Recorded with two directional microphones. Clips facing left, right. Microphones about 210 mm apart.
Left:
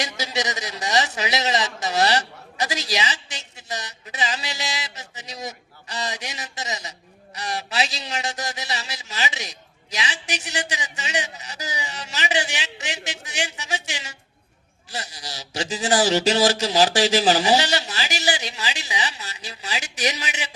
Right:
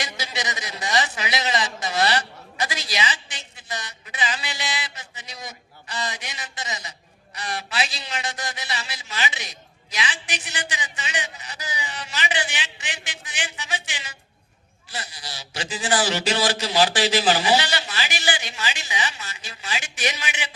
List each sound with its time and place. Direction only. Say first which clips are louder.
0.0 s a man's voice: left 4 dB; 40° left (ahead or behind)